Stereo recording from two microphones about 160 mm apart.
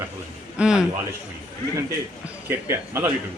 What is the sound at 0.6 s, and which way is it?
Speech, 5° right (ahead or behind).